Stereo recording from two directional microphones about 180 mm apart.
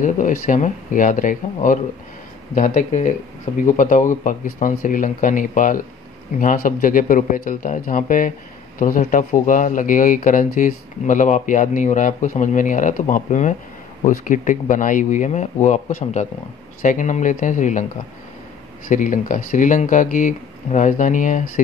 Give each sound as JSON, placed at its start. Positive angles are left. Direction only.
{"t": 0.0, "sound": "speech", "side_deg": 45}
{"t": 18.9, "sound": "speech", "side_deg": 45}